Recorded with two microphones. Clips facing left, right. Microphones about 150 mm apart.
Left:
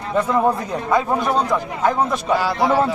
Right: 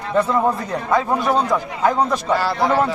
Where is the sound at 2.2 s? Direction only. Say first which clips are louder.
Even; 10° left (ahead or behind).